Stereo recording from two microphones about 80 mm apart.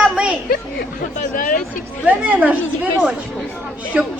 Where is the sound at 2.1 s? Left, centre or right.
Centre.